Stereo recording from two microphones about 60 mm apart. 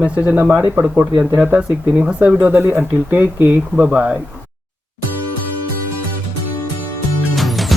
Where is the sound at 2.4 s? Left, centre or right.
Right.